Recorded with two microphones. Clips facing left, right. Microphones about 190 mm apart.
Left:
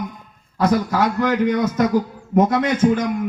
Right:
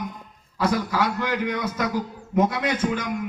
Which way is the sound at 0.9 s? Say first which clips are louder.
Left 6 dB; 50° left (ahead or behind).